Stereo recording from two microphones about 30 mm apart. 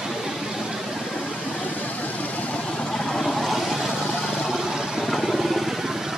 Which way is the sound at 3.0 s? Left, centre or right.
Centre.